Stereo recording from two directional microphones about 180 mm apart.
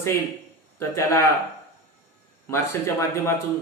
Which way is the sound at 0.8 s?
15° left (ahead or behind).